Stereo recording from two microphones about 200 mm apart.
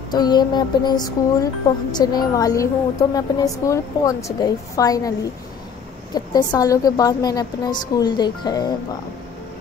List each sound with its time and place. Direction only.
0.1 s a woman's voice: 20° left (ahead or behind)
6.1 s speech: 20° left (ahead or behind)